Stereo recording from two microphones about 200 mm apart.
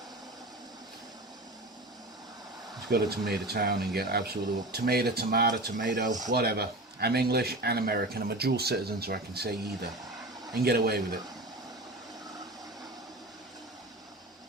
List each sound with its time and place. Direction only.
2.9 s speech: 55° right (ahead or behind)
10.6 s speech: 50° right (ahead or behind)